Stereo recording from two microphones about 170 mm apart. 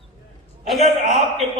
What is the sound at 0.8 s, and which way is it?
Speech, 45° right (ahead or behind).